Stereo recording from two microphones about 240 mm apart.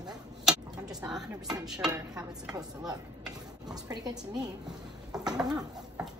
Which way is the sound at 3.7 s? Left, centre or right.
Centre.